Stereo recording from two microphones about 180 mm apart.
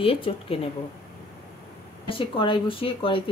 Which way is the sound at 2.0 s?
30° left (ahead or behind).